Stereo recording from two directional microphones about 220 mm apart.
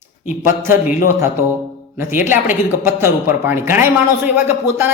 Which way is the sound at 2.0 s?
10° right (ahead or behind).